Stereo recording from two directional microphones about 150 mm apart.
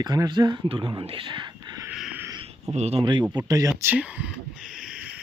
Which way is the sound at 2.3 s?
40° right (ahead or behind).